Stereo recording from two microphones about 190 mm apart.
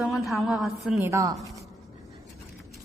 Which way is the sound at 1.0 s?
15° right (ahead or behind).